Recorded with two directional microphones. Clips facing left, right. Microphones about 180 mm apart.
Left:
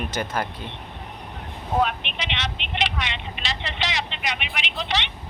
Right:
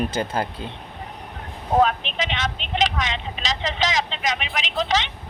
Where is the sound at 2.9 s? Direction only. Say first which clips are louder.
Right 4 dB; 40° right (ahead or behind).